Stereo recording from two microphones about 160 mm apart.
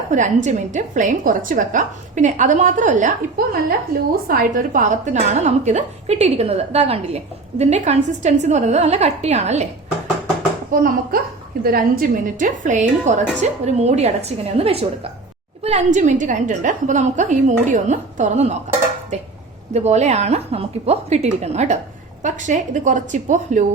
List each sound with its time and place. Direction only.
0.1 s a woman's voice: 50° right (ahead or behind)
10.7 s a child's voice: 60° right (ahead or behind)